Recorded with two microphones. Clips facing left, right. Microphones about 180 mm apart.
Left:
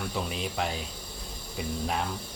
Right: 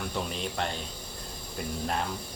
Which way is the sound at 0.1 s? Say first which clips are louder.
Even; 5° left (ahead or behind).